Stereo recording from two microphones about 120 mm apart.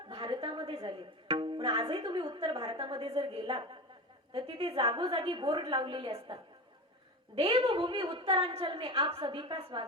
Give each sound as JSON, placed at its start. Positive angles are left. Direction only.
{"t": 0.1, "sound": "a sound", "side_deg": -45}
{"t": 1.3, "sound": "speech", "side_deg": -45}
{"t": 7.3, "sound": "speech", "side_deg": -55}